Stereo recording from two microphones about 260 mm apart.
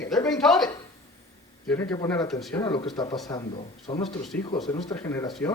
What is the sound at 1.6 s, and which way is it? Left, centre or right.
Speech, centre.